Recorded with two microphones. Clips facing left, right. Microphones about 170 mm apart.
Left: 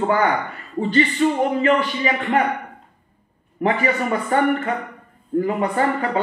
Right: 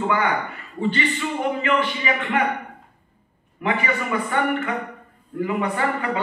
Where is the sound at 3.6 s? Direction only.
40° left (ahead or behind).